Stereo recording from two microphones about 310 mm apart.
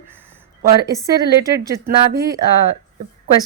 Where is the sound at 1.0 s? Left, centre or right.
Centre.